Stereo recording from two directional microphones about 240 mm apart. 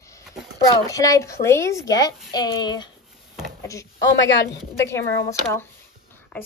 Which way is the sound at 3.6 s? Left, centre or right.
Centre.